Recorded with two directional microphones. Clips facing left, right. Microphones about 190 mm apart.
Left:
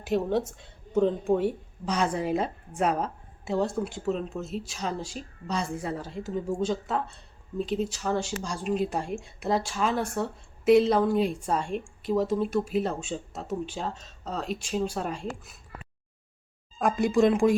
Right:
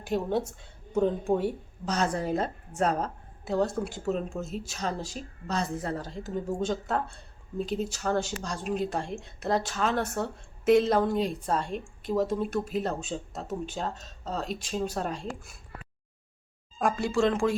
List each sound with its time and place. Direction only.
0.0 s a woman's voice: centre (ahead or behind)
4.7 s a woman's voice: 5° left (ahead or behind)
16.9 s a woman's voice: 15° left (ahead or behind)